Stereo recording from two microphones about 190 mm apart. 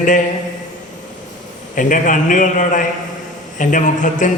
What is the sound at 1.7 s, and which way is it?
A man's voice, 45° left (ahead or behind).